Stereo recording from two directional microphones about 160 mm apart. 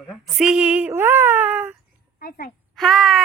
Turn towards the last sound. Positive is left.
turn(degrees=0)  # may be behind; listen again after turning